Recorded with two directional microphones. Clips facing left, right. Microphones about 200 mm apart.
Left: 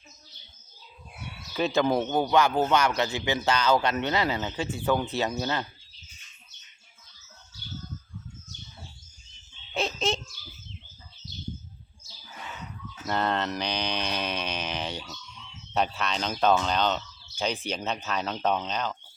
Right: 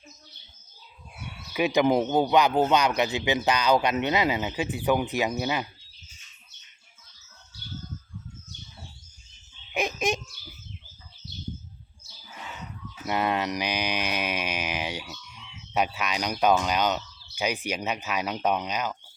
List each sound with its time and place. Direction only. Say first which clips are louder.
1.5 s a man's voice: right 2 dB; 15° right (ahead or behind)
9.7 s a sound: right 1 dB; 15° right (ahead or behind)
13.1 s mantra: right 1 dB; 10° right (ahead or behind)
17.3 s a man's voice: right 1 dB; 10° right (ahead or behind)